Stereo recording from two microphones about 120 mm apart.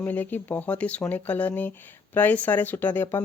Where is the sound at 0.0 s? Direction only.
15° left (ahead or behind).